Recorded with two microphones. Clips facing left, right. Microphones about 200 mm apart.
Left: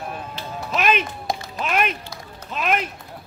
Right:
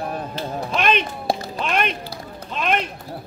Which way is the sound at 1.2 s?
30° right (ahead or behind).